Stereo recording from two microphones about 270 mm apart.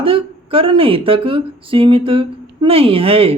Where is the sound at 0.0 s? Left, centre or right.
Centre.